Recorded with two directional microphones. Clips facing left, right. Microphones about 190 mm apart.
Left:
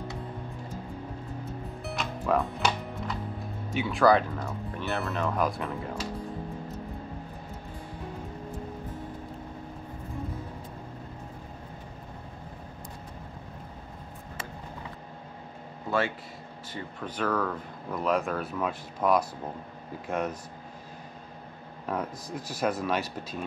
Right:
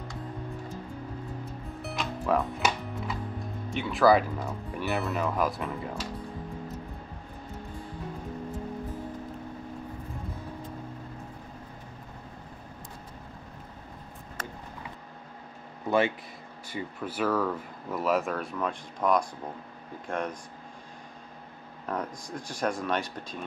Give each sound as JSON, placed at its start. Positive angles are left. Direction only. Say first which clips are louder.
{"t": 1.8, "sound": "music", "louder": "right 2 dB", "side_deg": 0}
{"t": 3.7, "sound": "speech", "louder": "even", "side_deg": 0}
{"t": 16.7, "sound": "speech", "louder": "right 2 dB", "side_deg": -5}
{"t": 21.8, "sound": "speech", "louder": "left 1 dB", "side_deg": 5}